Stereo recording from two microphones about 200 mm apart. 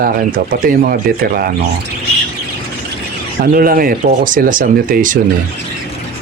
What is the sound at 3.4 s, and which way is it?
Speech, 45° right (ahead or behind).